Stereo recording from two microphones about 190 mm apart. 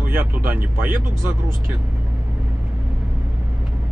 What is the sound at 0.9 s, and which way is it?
Speech, 45° right (ahead or behind).